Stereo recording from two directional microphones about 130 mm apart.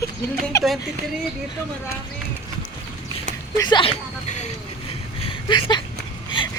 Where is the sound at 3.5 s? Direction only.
35° left (ahead or behind).